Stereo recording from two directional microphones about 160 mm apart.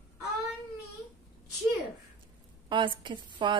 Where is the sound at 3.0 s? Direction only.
30° right (ahead or behind).